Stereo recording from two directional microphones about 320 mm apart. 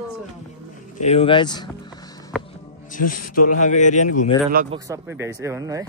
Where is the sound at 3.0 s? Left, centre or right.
Left.